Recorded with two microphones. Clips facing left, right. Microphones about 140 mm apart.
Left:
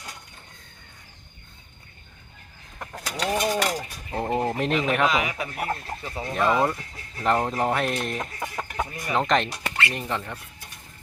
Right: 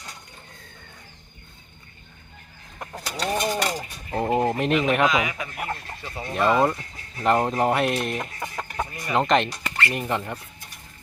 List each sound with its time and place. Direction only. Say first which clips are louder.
2.9 s a sound: even; centre (ahead or behind)
5.1 s speech: right 1 dB; 30° left (ahead or behind)
6.0 s speech: right 3 dB; centre (ahead or behind)
9.9 s speech: right 3 dB; 10° right (ahead or behind)